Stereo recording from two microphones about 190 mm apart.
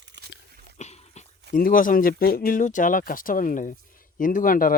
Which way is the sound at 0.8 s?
35° left (ahead or behind).